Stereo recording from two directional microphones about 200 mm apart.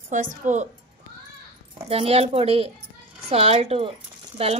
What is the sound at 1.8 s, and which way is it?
Speech, 30° right (ahead or behind).